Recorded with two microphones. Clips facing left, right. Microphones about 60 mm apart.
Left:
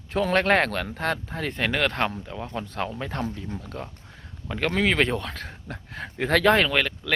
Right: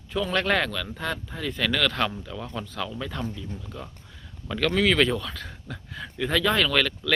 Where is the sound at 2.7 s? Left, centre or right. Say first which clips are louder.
Left 3 dB; left.